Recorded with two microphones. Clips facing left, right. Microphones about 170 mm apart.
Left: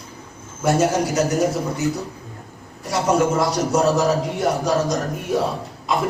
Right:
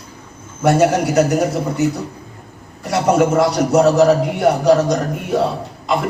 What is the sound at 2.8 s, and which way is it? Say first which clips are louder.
A man's voice: right 4 dB; 65° right (ahead or behind).